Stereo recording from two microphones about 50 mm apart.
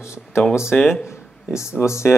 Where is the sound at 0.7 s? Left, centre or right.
Left.